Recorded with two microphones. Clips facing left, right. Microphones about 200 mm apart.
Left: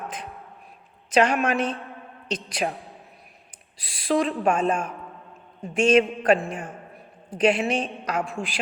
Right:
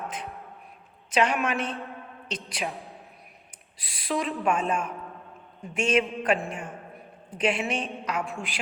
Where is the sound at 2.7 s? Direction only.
Centre (ahead or behind).